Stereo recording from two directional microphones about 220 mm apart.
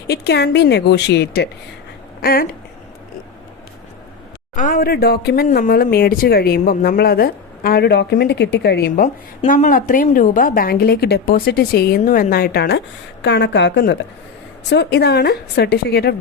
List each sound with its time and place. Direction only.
0.1 s speech: 50° left (ahead or behind)
4.5 s speech: 35° left (ahead or behind)
9.5 s speech: 40° left (ahead or behind)